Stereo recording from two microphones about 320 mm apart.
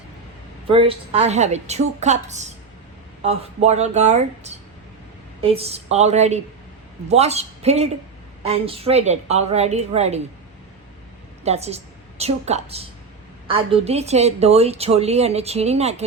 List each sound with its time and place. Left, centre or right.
0.7 s a woman's voice: centre
11.4 s a woman's voice: centre